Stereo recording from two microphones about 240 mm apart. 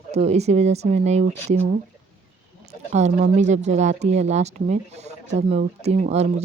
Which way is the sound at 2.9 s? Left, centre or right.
Right.